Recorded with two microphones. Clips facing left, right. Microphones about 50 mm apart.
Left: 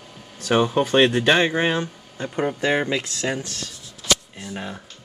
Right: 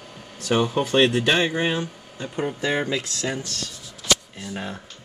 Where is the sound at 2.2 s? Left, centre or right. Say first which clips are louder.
Left 3 dB; left.